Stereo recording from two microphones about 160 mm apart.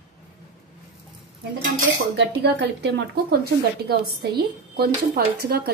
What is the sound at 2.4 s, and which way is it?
A woman's voice, 90° right.